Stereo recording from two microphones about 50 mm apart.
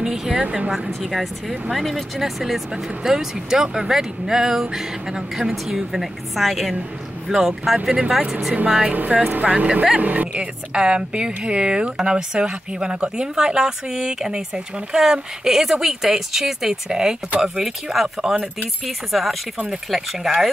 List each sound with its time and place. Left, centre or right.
0.0 s speech: centre
8.6 s speech: centre
8.9 s speech: right; by 18.4 s centre
18.9 s speech: centre